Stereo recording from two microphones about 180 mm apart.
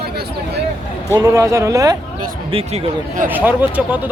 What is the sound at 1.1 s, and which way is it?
Speech, 20° right (ahead or behind).